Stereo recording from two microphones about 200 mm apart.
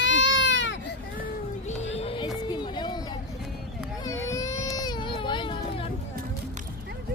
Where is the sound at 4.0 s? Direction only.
15° left (ahead or behind).